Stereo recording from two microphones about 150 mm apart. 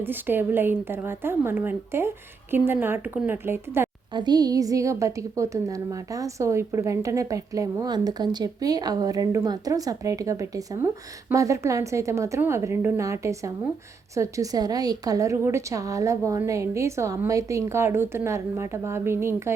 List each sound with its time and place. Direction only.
0.0 s a woman's voice: 15° right (ahead or behind)
4.1 s a woman's voice: 30° right (ahead or behind)